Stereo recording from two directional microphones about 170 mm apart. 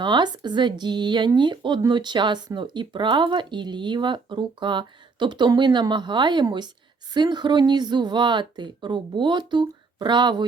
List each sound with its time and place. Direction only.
0.0 s speech: 25° right (ahead or behind)